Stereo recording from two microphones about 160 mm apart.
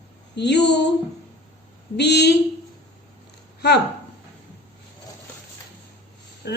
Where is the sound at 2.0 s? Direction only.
90° left.